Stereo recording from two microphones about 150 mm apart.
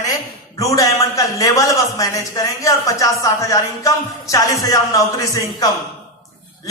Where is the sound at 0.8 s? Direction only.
20° left (ahead or behind).